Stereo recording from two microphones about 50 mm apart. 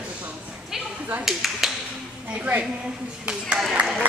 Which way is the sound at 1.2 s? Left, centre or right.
Centre.